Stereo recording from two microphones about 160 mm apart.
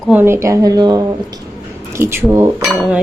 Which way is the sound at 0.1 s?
15° right (ahead or behind).